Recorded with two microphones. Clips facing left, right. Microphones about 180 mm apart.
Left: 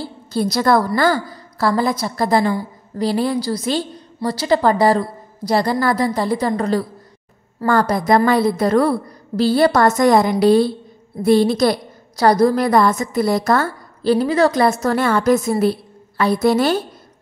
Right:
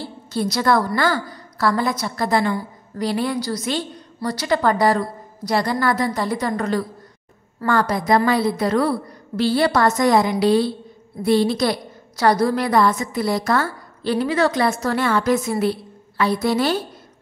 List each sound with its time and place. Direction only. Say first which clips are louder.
0.3 s a woman's voice: left 3 dB; 40° left (ahead or behind)